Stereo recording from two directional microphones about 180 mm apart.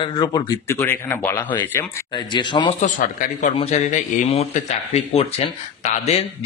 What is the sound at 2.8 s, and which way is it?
Speech, 45° left (ahead or behind).